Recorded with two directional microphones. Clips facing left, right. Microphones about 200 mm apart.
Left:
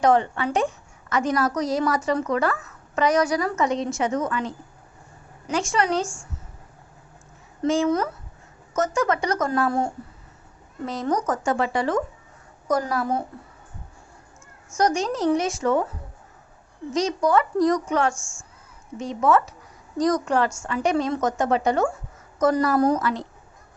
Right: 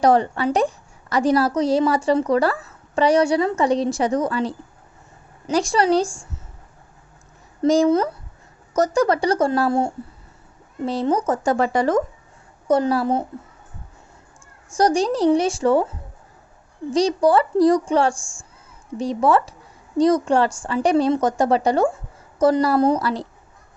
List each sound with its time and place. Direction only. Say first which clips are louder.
0.0 s speech: right 3 dB; 35° right (ahead or behind)
7.6 s a woman's voice: right 5 dB; 35° right (ahead or behind)
12.6 s a woman's voice: right 5 dB; 30° right (ahead or behind)
14.8 s speech: right 4 dB; 35° right (ahead or behind)
16.9 s speech: right 4 dB; 30° right (ahead or behind)